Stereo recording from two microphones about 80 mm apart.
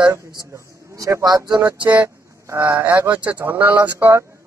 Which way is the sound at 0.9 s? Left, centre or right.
Right.